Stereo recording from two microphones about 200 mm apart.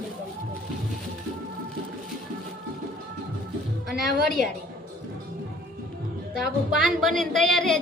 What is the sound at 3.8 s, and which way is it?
Speech, centre (ahead or behind).